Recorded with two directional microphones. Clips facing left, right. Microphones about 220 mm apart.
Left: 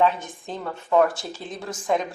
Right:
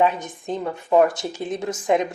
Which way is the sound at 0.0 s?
15° right (ahead or behind).